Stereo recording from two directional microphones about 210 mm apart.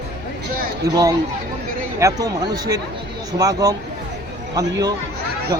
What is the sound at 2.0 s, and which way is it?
Speech, 15° right (ahead or behind).